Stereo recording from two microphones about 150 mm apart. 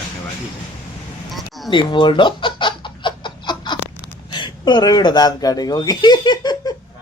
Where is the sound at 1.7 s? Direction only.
30° left (ahead or behind).